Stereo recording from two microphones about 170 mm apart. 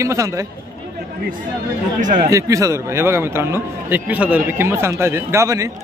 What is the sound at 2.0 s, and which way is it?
Speech, 50° right (ahead or behind).